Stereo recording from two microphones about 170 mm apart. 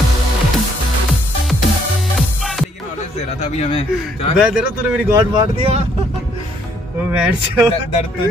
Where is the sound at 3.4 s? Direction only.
35° left (ahead or behind).